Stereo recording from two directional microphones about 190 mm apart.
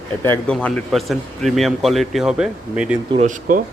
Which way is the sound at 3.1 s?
40° right (ahead or behind).